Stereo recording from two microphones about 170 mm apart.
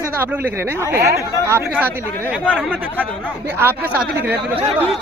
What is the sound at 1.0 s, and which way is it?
Speech, 65° right (ahead or behind).